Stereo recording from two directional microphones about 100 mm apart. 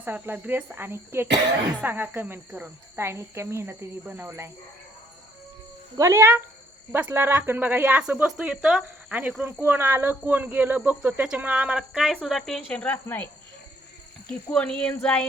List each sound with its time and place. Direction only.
0.0 s speech: 15° right (ahead or behind)
6.0 s speech: 25° right (ahead or behind); by 9.1 s 5° right (ahead or behind)
9.4 s speech: 20° right (ahead or behind); by 13.2 s 15° left (ahead or behind)
14.5 s speech: 10° left (ahead or behind)